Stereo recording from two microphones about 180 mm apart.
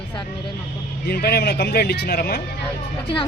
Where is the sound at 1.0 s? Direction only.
60° left (ahead or behind).